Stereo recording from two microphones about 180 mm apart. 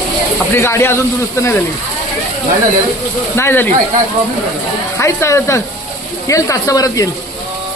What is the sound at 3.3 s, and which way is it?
Speech, 15° left (ahead or behind).